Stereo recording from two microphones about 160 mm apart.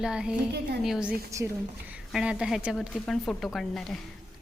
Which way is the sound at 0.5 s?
90° right.